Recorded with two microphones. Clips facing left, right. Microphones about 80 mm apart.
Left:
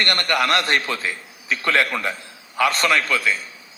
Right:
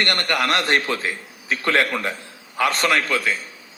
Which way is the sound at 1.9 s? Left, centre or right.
Centre.